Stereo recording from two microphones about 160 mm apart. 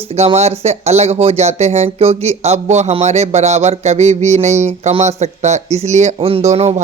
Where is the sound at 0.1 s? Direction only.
40° right (ahead or behind).